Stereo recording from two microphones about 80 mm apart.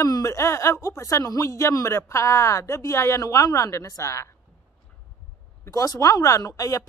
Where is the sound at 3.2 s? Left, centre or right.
Left.